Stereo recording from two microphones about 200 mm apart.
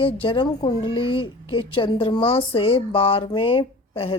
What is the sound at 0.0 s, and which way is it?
Speech, 25° left (ahead or behind).